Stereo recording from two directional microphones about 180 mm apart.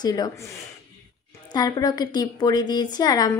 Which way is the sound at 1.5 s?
20° left (ahead or behind).